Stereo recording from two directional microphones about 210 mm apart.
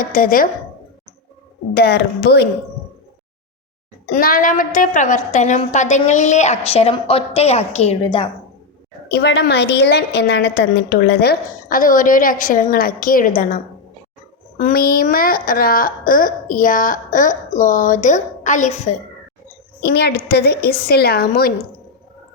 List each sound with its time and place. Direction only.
0.0 s a woman's voice: 40° left (ahead or behind)
1.7 s a woman's voice: 50° left (ahead or behind)
4.1 s a woman's voice: 40° left (ahead or behind); by 8.3 s 25° left (ahead or behind)
9.0 s a woman's voice: 50° left (ahead or behind)
14.6 s a woman's voice: 45° left (ahead or behind)
19.8 s a woman's voice: 50° left (ahead or behind)